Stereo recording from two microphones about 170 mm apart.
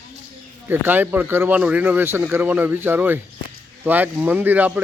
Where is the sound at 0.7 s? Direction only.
10° right (ahead or behind).